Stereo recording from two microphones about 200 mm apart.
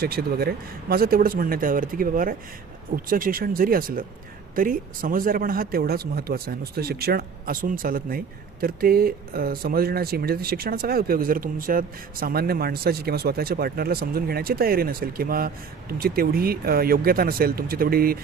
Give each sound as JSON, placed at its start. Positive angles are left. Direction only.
{"t": 0.0, "sound": "speech", "side_deg": -50}